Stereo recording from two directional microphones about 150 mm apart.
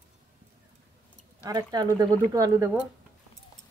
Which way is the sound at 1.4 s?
25° right (ahead or behind).